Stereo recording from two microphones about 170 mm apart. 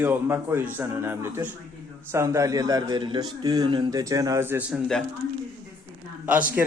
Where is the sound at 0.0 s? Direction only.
15° right (ahead or behind).